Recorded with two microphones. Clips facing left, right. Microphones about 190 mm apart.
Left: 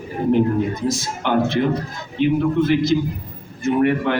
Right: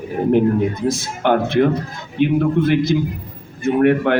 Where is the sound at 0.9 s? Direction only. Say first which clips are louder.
Right 4 dB; 55° right (ahead or behind).